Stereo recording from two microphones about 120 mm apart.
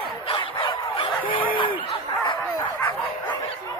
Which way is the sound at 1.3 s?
45° left (ahead or behind).